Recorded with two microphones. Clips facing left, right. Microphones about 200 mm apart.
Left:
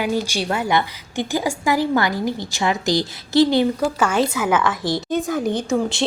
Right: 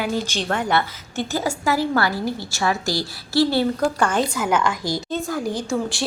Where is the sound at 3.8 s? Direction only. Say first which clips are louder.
Left 1 dB; 5° left (ahead or behind).